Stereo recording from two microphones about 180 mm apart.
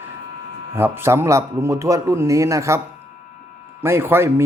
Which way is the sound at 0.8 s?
10° right (ahead or behind).